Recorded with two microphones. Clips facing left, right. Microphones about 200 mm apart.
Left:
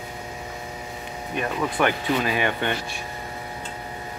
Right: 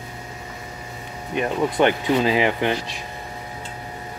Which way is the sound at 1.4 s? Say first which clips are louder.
Right 4 dB; 20° right (ahead or behind).